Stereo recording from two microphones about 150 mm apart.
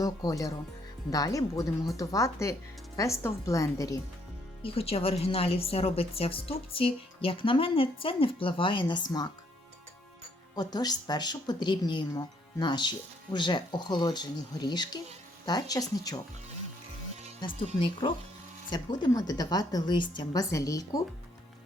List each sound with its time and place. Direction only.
0.0 s speech: 25° left (ahead or behind)
4.6 s a woman's voice: 40° left (ahead or behind)
10.5 s speech: 25° left (ahead or behind)
17.7 s a woman's voice: 35° left (ahead or behind)